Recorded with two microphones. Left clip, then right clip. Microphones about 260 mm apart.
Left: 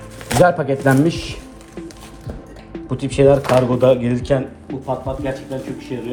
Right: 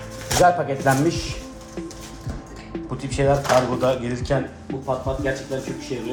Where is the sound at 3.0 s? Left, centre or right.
Left.